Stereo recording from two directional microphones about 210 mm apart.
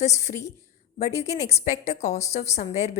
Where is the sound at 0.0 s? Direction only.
30° left (ahead or behind).